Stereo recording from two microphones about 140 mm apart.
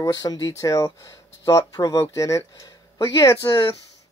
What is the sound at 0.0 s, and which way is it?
Speech, 30° left (ahead or behind).